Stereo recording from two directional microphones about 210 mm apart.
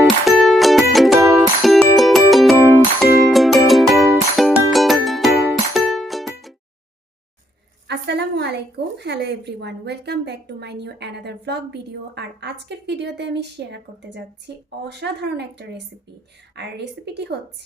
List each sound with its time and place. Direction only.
0.0 s music: centre (ahead or behind)
7.9 s a woman's voice: 55° right (ahead or behind)